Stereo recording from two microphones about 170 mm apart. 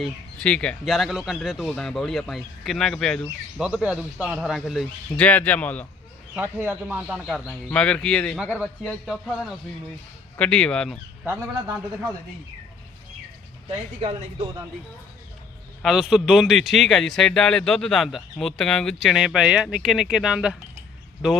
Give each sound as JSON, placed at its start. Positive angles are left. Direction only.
{"t": 0.0, "sound": "a man's voice", "side_deg": 5}
{"t": 6.3, "sound": "a man's voice", "side_deg": -10}
{"t": 13.7, "sound": "speech", "side_deg": -30}
{"t": 15.8, "sound": "a man's voice", "side_deg": 0}